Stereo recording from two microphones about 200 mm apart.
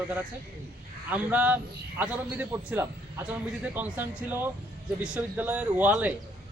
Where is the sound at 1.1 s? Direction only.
10° right (ahead or behind).